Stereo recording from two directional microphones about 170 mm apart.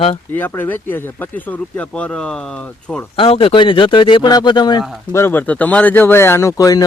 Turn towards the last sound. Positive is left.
turn(degrees=20)  # may be behind; listen again after turning